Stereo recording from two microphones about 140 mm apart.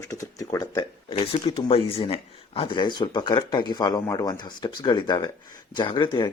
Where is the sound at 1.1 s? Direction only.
40° left (ahead or behind).